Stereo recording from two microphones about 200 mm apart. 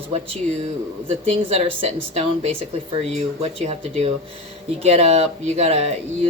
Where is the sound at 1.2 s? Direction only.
30° right (ahead or behind).